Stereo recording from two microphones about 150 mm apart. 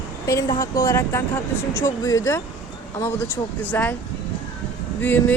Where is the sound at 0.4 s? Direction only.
30° left (ahead or behind).